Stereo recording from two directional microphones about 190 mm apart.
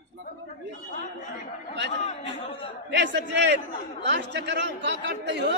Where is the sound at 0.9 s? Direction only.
40° left (ahead or behind).